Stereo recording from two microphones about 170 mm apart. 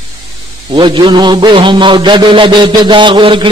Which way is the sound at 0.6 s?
30° right (ahead or behind).